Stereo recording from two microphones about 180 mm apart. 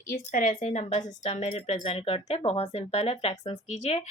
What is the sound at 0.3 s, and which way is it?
Speech, 50° left (ahead or behind).